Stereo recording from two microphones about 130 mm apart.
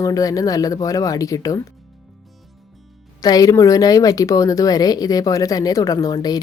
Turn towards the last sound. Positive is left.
turn(degrees=30)  # may be behind; listen again after turning